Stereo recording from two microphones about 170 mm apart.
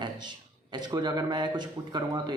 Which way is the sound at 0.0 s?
25° right (ahead or behind).